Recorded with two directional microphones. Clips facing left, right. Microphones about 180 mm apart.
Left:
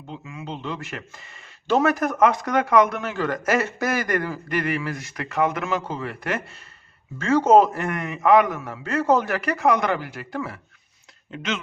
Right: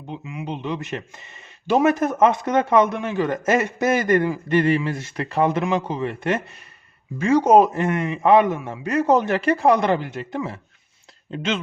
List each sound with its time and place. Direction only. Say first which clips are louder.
0.1 s a man's voice: right 4 dB; 15° right (ahead or behind)
5.6 s a man's voice: right 4 dB; 15° right (ahead or behind)